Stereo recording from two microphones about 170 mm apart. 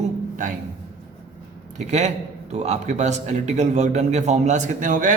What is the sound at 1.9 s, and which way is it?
A man's voice, 40° right (ahead or behind).